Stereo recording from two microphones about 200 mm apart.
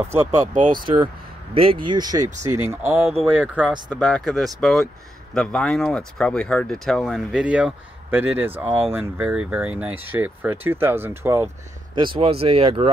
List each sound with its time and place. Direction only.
0.1 s speech: 15° right (ahead or behind)
0.6 s speech: 45° right (ahead or behind)
0.8 s speech: 25° right (ahead or behind)
12.2 s speech: 30° right (ahead or behind)